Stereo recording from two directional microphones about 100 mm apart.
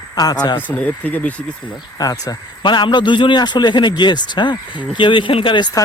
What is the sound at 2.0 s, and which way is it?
Speech, 40° left (ahead or behind).